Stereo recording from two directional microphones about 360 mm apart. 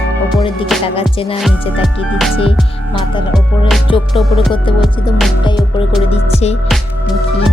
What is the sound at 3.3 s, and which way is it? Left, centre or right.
Music, centre.